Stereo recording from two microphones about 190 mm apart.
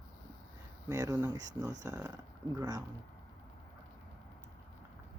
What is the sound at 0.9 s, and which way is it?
Speech, 20° right (ahead or behind).